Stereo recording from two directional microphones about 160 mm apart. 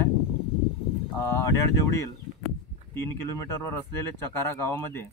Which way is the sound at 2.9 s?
15° left (ahead or behind).